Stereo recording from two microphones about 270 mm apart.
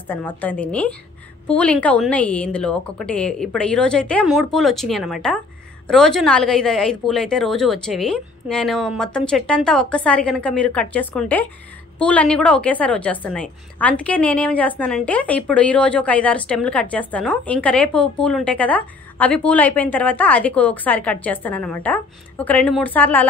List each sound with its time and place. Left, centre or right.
0.4 s a woman's voice: centre